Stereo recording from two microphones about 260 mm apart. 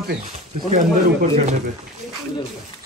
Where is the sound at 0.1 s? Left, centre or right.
Right.